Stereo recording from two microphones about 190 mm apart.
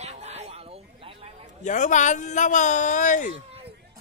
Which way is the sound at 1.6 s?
40° left (ahead or behind).